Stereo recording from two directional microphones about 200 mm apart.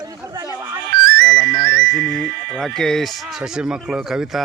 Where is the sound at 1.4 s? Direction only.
50° right (ahead or behind).